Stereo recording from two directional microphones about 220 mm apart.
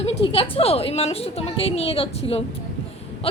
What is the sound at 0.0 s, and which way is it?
A woman's voice, 25° left (ahead or behind).